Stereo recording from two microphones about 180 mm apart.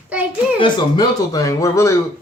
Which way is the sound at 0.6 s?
20° left (ahead or behind).